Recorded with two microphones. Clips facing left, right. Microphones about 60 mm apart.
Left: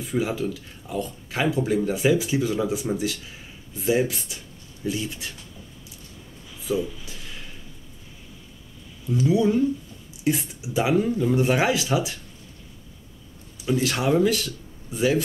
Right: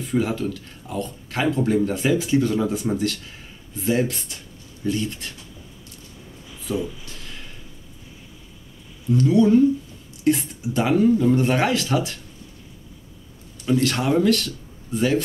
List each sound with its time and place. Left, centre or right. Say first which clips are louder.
0.0 s speech: right 2 dB; centre
6.6 s a sound: left 1 dB; centre
9.1 s speech: right 4 dB; centre
13.7 s speech: right 2 dB; centre